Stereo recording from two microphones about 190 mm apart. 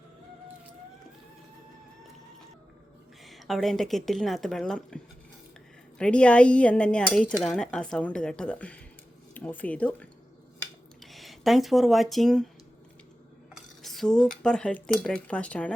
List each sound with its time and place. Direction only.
3.2 s speech: centre (ahead or behind)
6.0 s speech: 5° left (ahead or behind)
13.5 s speech: centre (ahead or behind)